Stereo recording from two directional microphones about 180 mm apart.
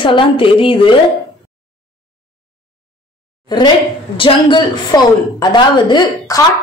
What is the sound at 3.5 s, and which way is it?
A woman's voice, 25° left (ahead or behind).